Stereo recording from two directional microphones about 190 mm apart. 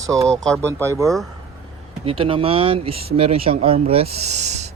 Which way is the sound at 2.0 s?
30° right (ahead or behind).